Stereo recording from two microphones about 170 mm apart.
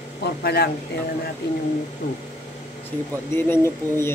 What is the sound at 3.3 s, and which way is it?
Speech, 15° left (ahead or behind).